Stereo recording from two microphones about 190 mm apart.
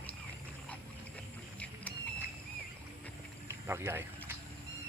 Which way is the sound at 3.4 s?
15° right (ahead or behind).